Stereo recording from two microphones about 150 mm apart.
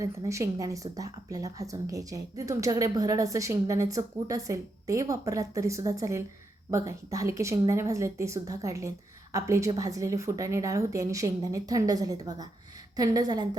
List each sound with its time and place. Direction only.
0.0 s a woman's voice: 20° right (ahead or behind)